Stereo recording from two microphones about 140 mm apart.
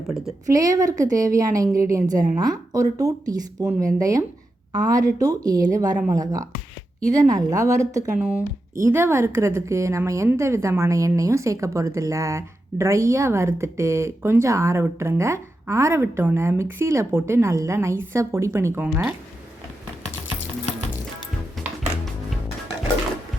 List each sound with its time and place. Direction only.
0.4 s a woman's voice: 25° right (ahead or behind)